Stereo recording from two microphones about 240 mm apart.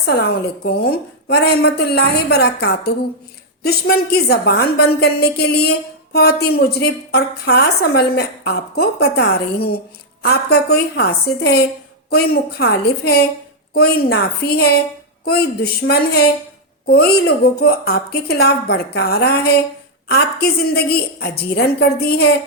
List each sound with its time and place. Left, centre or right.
0.0 s a woman's voice: left